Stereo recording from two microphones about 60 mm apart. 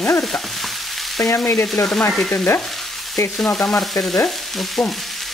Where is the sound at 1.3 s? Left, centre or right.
Left.